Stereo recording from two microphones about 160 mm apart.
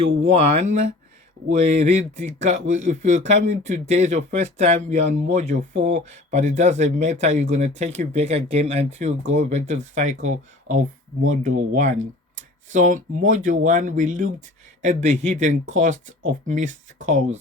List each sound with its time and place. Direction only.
0.0 s speech: 40° right (ahead or behind)